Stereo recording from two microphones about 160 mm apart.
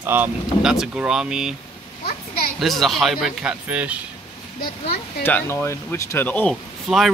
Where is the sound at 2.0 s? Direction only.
70° left (ahead or behind).